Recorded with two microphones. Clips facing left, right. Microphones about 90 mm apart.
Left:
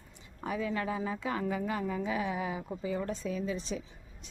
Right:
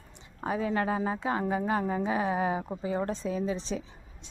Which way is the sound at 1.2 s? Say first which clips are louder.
Right 4 dB; 30° right (ahead or behind).